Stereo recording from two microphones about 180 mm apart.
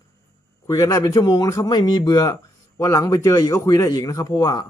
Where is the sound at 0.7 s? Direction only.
20° left (ahead or behind).